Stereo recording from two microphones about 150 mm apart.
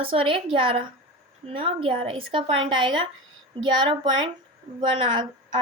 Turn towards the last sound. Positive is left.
turn(degrees=-30)  # may be behind; listen again after turning